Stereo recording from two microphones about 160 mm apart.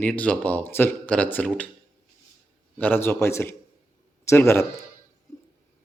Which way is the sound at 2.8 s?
10° left (ahead or behind).